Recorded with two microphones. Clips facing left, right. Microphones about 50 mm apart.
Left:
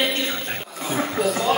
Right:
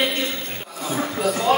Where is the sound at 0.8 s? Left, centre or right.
Left.